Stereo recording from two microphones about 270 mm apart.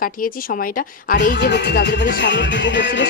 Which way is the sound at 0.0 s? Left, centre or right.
Left.